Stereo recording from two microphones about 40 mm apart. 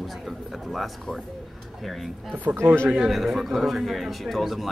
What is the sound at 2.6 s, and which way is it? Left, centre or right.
Speech, right.